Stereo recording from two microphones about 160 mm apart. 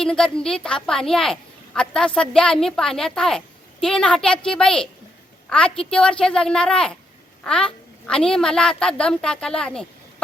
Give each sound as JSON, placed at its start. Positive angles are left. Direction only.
{"t": 0.0, "sound": "a woman's voice", "side_deg": 5}